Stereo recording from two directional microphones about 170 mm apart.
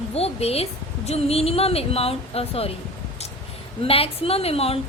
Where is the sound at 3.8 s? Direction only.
35° left (ahead or behind).